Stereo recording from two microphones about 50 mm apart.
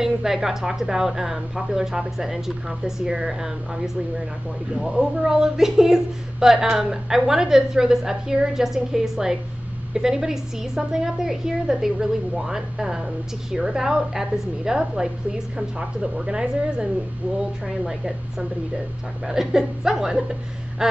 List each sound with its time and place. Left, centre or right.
0.0 s a woman's voice: centre
19.2 s a woman's voice: centre